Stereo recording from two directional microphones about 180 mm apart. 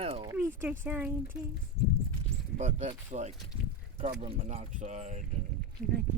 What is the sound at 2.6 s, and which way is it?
Speech, 40° right (ahead or behind).